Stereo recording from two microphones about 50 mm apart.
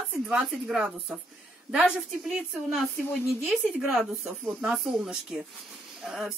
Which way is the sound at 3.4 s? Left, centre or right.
Centre.